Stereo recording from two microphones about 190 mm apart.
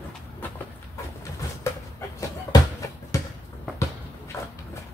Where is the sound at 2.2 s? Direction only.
15° left (ahead or behind).